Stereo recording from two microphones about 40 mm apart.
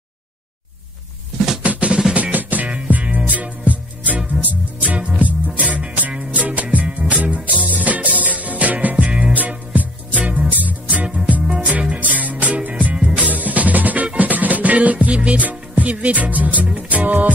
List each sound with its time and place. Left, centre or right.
1.6 s drum: right
2.3 s music: right